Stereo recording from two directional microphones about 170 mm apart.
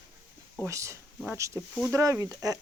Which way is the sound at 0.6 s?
15° right (ahead or behind).